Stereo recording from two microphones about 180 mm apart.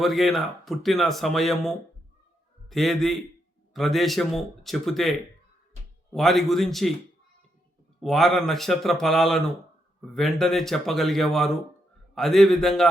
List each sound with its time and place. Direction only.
0.0 s speech: centre (ahead or behind)
6.1 s speech: centre (ahead or behind)
8.0 s speech: centre (ahead or behind)